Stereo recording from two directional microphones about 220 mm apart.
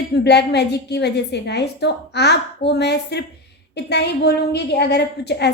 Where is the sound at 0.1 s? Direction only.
50° left (ahead or behind).